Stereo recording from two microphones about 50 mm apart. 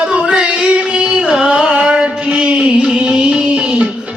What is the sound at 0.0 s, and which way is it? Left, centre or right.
Music, centre.